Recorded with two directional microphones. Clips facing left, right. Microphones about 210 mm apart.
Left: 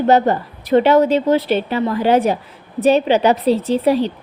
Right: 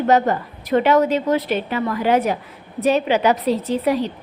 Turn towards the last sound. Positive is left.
turn(degrees=30)  # may be behind; listen again after turning